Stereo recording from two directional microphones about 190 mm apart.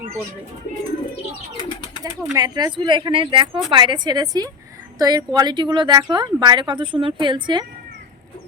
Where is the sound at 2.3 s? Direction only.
20° right (ahead or behind).